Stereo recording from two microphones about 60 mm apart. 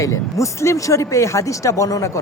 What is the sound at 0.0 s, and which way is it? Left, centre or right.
Speech, left.